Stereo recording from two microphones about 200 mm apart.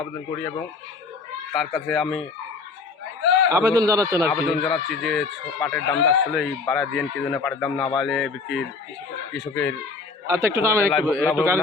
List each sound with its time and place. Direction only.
1.5 s speech: centre (ahead or behind)
3.5 s speech: 20° right (ahead or behind)
4.3 s speech: centre (ahead or behind)
10.2 s speech: 15° right (ahead or behind)
10.9 s speech: 5° left (ahead or behind)
11.3 s speech: 10° right (ahead or behind)